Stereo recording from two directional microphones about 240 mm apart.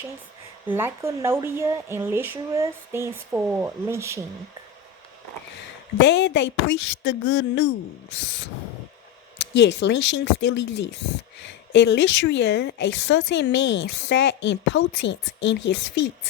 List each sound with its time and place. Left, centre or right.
0.7 s speech: centre
6.0 s a woman's voice: left
9.4 s a woman's voice: left